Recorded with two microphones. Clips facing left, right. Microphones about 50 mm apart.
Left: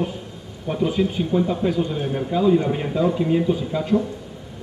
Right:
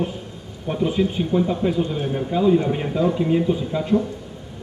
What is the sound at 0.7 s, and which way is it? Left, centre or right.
A man's voice, centre.